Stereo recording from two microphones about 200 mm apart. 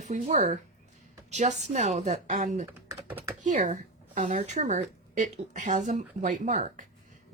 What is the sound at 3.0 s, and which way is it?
Speech, 10° right (ahead or behind).